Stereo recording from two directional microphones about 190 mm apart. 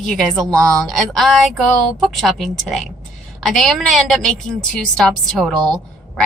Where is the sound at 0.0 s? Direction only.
5° left (ahead or behind).